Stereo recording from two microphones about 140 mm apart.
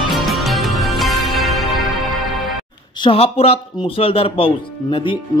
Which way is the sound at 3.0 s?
40° left (ahead or behind).